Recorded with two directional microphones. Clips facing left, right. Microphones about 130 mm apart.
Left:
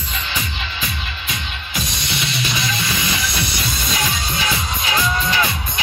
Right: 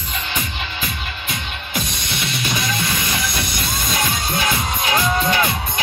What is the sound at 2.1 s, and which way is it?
Music, 50° right (ahead or behind).